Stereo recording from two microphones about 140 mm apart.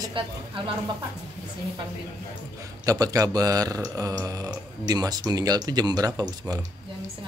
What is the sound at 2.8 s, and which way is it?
Speech, 25° right (ahead or behind).